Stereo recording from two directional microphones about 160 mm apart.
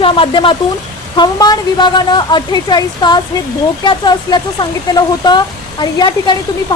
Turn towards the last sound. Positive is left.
turn(degrees=25)  # may be behind; listen again after turning